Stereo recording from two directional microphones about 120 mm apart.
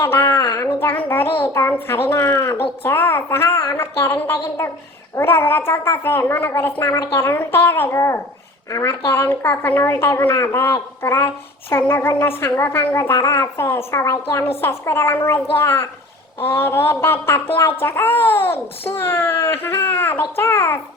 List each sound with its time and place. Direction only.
0.0 s a woman's voice: 20° left (ahead or behind)